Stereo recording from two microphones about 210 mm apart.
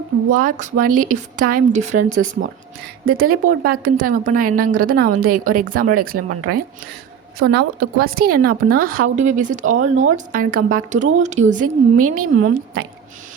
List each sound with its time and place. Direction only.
0.3 s a woman's voice: 40° right (ahead or behind)